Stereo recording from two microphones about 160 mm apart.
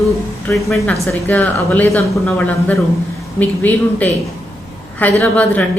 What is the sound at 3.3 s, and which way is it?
A woman's voice, 10° left (ahead or behind).